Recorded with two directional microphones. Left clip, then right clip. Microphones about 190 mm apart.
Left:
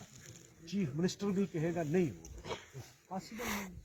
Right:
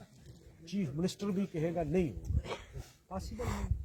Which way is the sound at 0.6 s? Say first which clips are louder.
Even; 40° right (ahead or behind).